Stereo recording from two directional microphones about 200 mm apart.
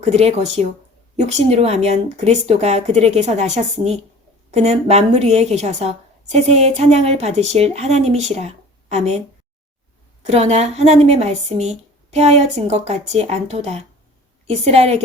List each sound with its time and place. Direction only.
0.0 s a woman's voice: 35° right (ahead or behind)
10.2 s a woman's voice: 30° right (ahead or behind)